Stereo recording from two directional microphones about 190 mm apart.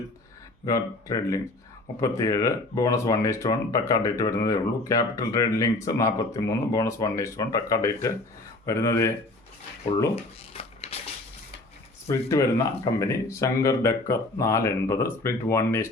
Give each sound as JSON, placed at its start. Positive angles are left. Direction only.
{"t": 0.6, "sound": "speech", "side_deg": 20}
{"t": 10.5, "sound": "a sound", "side_deg": 30}
{"t": 12.0, "sound": "speech", "side_deg": 15}